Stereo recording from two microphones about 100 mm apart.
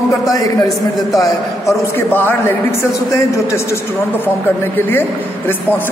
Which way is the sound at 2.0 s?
20° left (ahead or behind).